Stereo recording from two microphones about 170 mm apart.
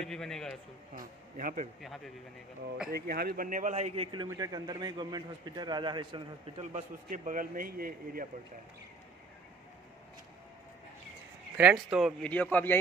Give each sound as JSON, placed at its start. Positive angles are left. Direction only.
{"t": 0.0, "sound": "speech", "side_deg": 5}
{"t": 0.9, "sound": "a man's voice", "side_deg": -50}
{"t": 2.9, "sound": "a man's voice", "side_deg": -65}
{"t": 6.6, "sound": "a man's voice", "side_deg": -45}
{"t": 11.5, "sound": "speech", "side_deg": -5}